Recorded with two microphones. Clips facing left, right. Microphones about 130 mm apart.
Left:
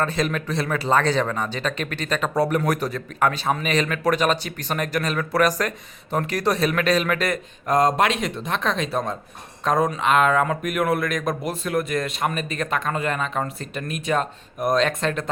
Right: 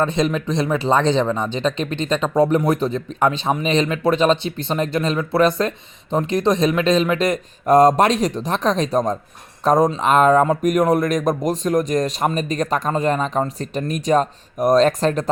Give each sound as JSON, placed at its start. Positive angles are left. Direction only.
{"t": 0.0, "sound": "speech", "side_deg": -20}
{"t": 7.7, "sound": "speech", "side_deg": -40}